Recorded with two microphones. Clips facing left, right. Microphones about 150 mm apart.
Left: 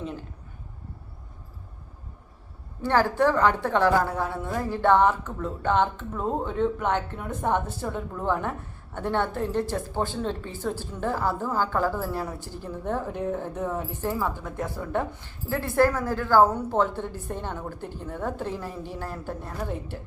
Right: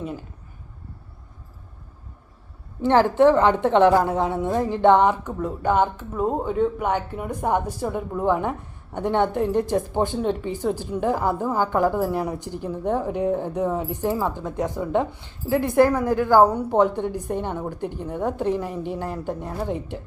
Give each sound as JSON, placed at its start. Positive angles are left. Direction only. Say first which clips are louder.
{"t": 2.8, "sound": "a woman's voice", "louder": "right 6 dB", "side_deg": -20}